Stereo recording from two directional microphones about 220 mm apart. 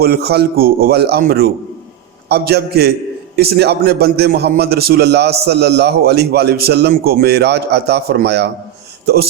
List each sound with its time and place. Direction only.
0.0 s a man's voice: 45° right (ahead or behind)